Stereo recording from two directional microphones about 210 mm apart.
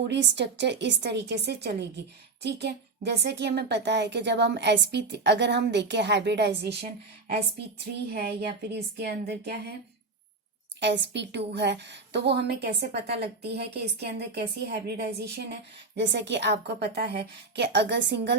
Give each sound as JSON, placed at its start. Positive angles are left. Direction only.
{"t": 0.1, "sound": "a woman's voice", "side_deg": -55}
{"t": 10.8, "sound": "a woman's voice", "side_deg": -55}